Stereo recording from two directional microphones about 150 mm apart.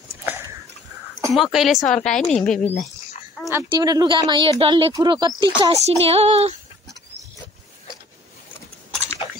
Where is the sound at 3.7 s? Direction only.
25° right (ahead or behind).